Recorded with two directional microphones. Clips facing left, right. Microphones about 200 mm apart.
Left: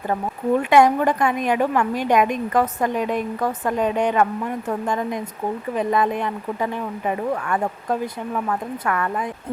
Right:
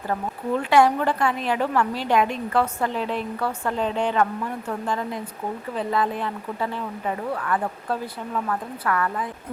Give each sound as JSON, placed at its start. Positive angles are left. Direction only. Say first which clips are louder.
{"t": 0.6, "sound": "a woman's voice", "louder": "left 2 dB", "side_deg": 15}
{"t": 7.4, "sound": "speech", "louder": "left 2 dB", "side_deg": 25}